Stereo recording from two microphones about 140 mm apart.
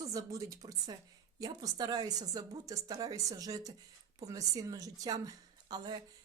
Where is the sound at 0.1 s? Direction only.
25° right (ahead or behind).